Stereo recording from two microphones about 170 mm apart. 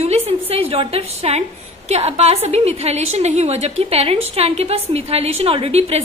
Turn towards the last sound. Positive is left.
turn(degrees=-35)  # may be behind; listen again after turning